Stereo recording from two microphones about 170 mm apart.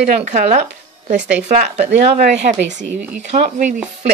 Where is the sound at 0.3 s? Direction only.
50° right (ahead or behind).